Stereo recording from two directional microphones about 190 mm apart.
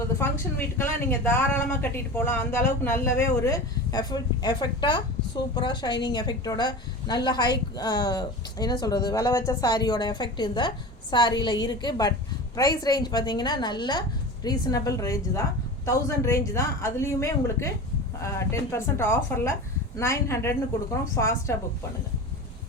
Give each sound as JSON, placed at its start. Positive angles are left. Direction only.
{"t": 0.8, "sound": "a woman's voice", "side_deg": 10}